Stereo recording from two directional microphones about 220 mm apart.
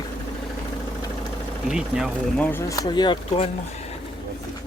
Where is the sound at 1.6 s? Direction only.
5° right (ahead or behind); by 3.5 s 25° left (ahead or behind).